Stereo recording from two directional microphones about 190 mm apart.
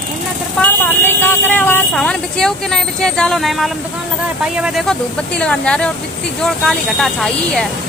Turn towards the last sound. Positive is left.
turn(degrees=5)  # may be behind; listen again after turning